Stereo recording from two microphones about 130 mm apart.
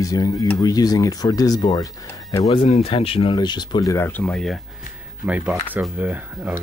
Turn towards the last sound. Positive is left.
turn(degrees=-10)  # may be behind; listen again after turning